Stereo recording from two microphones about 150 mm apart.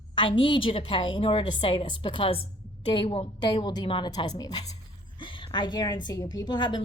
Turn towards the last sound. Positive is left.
turn(degrees=30)  # may be behind; listen again after turning